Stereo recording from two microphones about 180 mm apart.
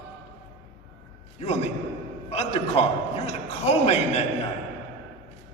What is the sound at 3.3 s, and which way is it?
Speech, 35° left (ahead or behind).